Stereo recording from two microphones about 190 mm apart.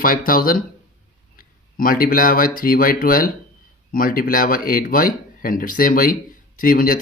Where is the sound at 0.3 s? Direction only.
50° left (ahead or behind).